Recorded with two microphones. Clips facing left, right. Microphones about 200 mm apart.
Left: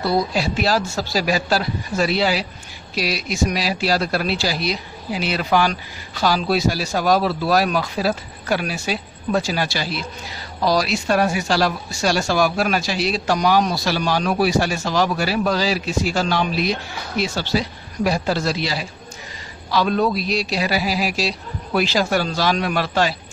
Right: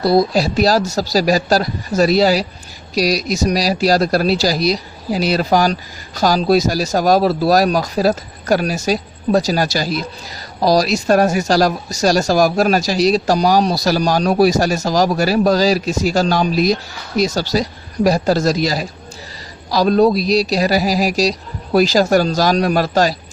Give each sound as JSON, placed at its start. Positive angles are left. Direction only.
{"t": 0.0, "sound": "speech", "side_deg": -35}